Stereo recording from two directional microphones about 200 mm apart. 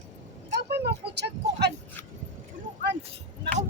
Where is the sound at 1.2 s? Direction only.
55° right (ahead or behind).